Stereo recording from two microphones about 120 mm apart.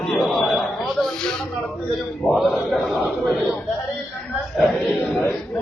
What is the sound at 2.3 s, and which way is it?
A man's voice, centre (ahead or behind).